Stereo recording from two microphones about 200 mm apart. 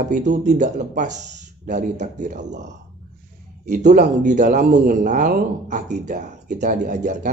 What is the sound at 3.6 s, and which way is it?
Speech, 40° right (ahead or behind).